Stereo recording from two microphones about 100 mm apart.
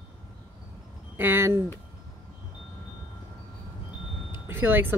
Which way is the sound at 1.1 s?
25° right (ahead or behind).